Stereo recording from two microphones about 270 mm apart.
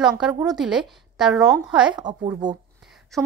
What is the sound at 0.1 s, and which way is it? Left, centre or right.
A woman's voice, centre.